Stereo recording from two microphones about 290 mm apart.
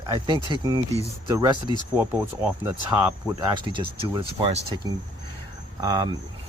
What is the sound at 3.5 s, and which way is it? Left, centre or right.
Speech, centre.